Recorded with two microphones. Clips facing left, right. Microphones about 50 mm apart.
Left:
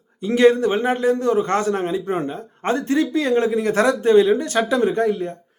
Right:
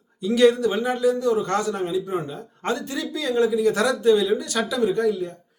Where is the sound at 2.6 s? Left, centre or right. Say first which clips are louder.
Left 7 dB; left.